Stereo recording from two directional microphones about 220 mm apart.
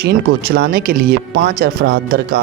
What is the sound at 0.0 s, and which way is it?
Speech, 45° right (ahead or behind).